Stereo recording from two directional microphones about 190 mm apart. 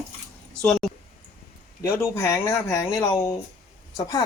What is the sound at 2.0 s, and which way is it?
Speech, 15° left (ahead or behind).